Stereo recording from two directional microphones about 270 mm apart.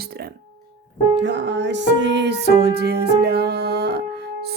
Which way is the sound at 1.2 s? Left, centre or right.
Right.